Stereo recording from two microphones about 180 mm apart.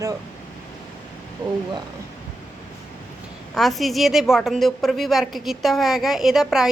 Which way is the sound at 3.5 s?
Centre (ahead or behind).